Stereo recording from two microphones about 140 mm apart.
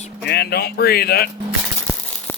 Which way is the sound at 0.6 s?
90° left.